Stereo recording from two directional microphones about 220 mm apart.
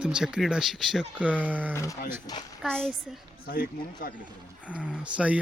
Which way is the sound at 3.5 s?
40° left (ahead or behind).